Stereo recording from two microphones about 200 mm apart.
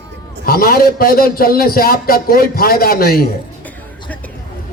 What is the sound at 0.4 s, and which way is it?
A man's voice, 45° left (ahead or behind).